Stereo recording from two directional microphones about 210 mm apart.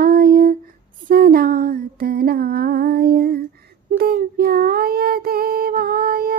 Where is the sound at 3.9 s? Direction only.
45° right (ahead or behind).